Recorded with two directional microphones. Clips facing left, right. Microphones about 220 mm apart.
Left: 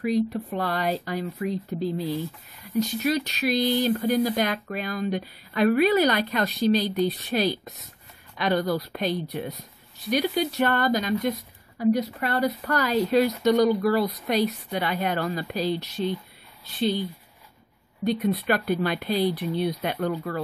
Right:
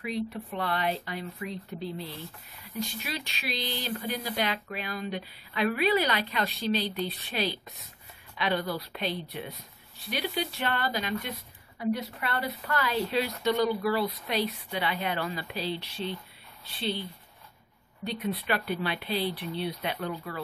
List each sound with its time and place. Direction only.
0.0 s speech: 40° left (ahead or behind)
18.0 s speech: 45° left (ahead or behind)